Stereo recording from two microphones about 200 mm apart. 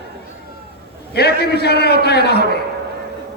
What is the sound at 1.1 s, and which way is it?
A man's voice, 55° left (ahead or behind).